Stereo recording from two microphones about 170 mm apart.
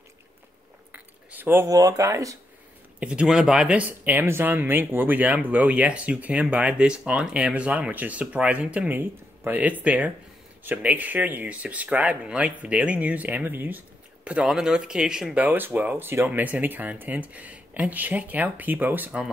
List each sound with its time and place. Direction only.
0.9 s speech: 10° right (ahead or behind)
3.0 s speech: 5° right (ahead or behind)